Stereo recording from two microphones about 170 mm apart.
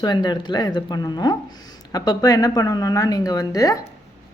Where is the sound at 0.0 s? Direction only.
25° left (ahead or behind).